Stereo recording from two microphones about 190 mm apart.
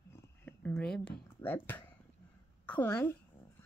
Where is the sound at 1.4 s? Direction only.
10° left (ahead or behind).